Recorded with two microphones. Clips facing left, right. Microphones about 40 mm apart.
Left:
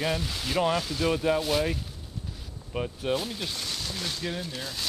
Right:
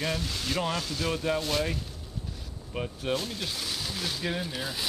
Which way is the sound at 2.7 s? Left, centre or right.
Centre.